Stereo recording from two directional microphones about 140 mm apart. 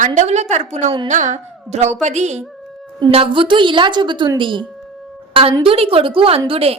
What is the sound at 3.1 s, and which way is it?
A woman's voice, 40° right (ahead or behind).